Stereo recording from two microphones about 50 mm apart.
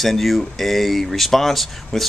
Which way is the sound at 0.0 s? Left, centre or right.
Centre.